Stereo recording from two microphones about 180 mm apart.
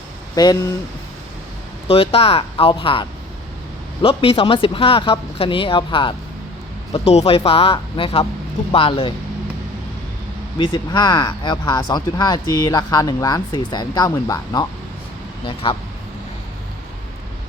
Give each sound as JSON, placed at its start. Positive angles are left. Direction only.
{"t": 0.4, "sound": "speech", "side_deg": 20}
{"t": 1.9, "sound": "speech", "side_deg": 30}
{"t": 10.6, "sound": "speech", "side_deg": 25}